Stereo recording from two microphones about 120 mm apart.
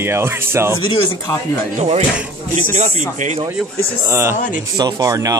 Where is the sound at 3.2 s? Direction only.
90° right.